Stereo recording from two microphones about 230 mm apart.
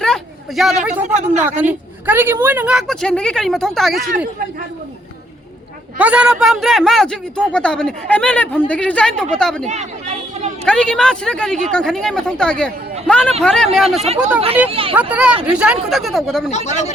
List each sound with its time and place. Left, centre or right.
0.0 s a sound: centre
1.0 s speech: right
1.6 s a man's voice: centre
6.0 s a man's voice: centre
9.6 s chatter: right
10.7 s a man's voice: centre
14.7 s speech: right
14.9 s a man's voice: centre
16.5 s speech: left